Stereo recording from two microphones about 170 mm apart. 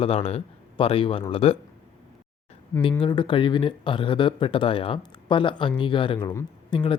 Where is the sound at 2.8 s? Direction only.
30° left (ahead or behind).